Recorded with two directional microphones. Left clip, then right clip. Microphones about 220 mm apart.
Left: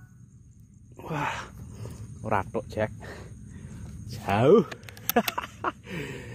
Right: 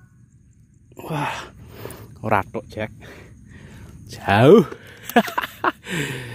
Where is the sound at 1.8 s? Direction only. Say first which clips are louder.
Right 10 dB; 45° right (ahead or behind).